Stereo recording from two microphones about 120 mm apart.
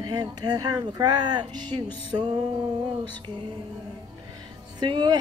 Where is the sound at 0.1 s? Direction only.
35° right (ahead or behind).